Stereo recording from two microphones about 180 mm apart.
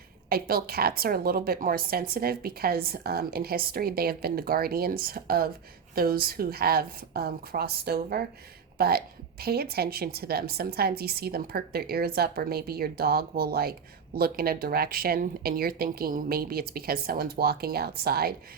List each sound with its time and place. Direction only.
0.3 s a woman's voice: 55° right (ahead or behind)